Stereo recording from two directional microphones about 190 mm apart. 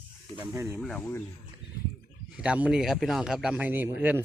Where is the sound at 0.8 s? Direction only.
5° left (ahead or behind).